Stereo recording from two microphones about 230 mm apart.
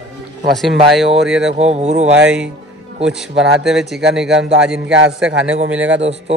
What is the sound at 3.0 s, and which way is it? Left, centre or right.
A man's voice, centre.